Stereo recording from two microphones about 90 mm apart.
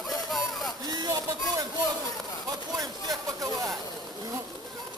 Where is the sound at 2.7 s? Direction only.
45° right (ahead or behind).